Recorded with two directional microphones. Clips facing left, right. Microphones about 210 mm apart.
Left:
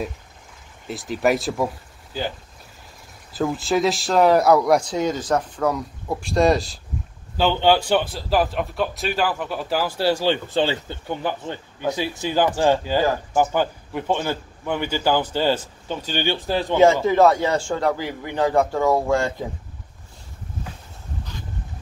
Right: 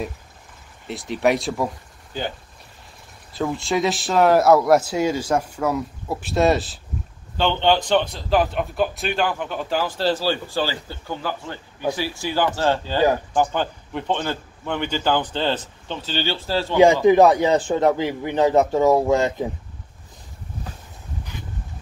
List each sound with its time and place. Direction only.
0.8 s speech: centre (ahead or behind)
3.3 s speech: centre (ahead or behind); by 16.7 s 15° left (ahead or behind)
16.7 s speech: 15° right (ahead or behind)